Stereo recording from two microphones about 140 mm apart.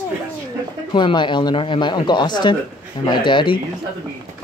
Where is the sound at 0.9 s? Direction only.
35° left (ahead or behind).